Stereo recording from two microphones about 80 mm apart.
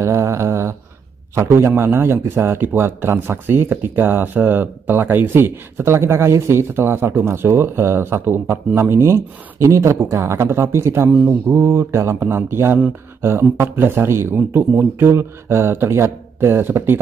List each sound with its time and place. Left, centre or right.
0.0 s a sound: right
1.3 s speech: right
11.1 s speech: centre
11.4 s speech: right